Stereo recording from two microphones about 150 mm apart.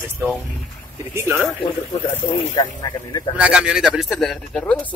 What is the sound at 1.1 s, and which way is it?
Speech, 15° right (ahead or behind).